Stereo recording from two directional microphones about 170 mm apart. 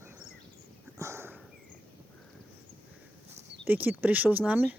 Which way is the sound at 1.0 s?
15° right (ahead or behind).